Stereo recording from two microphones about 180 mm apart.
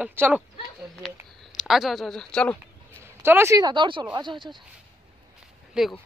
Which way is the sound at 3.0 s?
15° right (ahead or behind).